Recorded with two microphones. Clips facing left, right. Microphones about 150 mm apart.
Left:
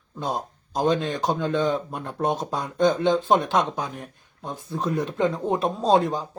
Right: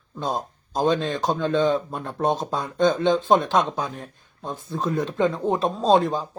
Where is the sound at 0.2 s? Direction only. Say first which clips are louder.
Right 1 dB; 15° left (ahead or behind).